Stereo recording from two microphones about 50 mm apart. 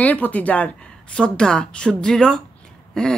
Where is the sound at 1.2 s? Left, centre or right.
Centre.